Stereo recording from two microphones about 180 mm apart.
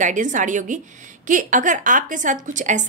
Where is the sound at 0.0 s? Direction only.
45° right (ahead or behind).